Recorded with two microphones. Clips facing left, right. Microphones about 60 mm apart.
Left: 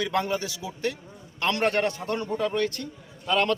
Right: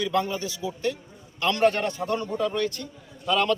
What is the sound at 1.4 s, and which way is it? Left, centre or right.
Speech, left.